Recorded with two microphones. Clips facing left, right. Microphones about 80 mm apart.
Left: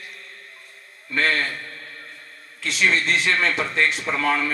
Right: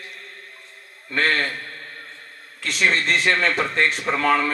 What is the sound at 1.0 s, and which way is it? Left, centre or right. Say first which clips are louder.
A man's voice: right 1 dB; right.